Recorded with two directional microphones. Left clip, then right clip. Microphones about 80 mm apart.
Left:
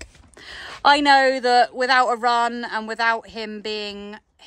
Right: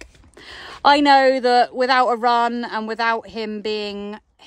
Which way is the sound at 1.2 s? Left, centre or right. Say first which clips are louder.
Right 2 dB; right.